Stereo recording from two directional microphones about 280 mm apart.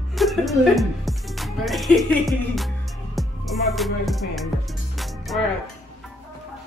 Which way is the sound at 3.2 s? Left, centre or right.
Centre.